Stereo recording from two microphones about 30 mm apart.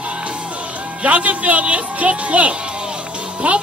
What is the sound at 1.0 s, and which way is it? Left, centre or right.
Speech, right.